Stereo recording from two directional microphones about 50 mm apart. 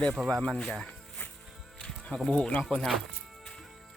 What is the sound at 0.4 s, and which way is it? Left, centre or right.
Speech, centre.